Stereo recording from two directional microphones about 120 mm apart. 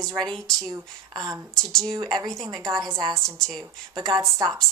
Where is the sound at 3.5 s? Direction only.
35° right (ahead or behind).